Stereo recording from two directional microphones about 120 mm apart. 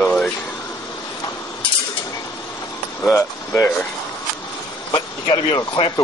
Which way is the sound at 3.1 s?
20° left (ahead or behind).